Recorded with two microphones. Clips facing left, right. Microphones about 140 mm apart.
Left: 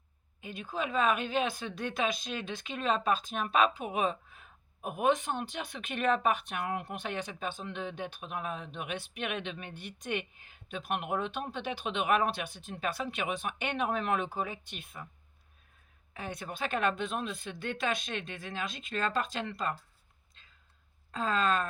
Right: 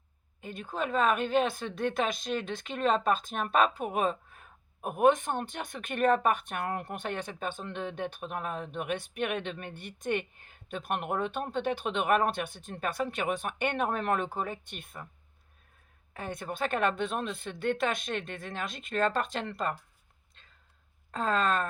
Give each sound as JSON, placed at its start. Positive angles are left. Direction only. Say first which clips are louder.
{"t": 0.4, "sound": "speech", "louder": "right 2 dB", "side_deg": -50}
{"t": 16.1, "sound": "speech", "louder": "right 3 dB", "side_deg": -50}
{"t": 21.1, "sound": "speech", "louder": "right 1 dB", "side_deg": -55}